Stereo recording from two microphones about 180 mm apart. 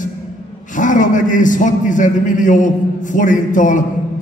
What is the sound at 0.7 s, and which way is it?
A man's voice, 45° left (ahead or behind).